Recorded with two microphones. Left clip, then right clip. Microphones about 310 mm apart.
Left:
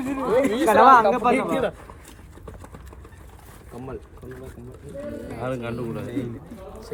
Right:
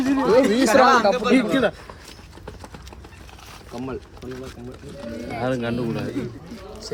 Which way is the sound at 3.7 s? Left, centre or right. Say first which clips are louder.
Right 5 dB; right.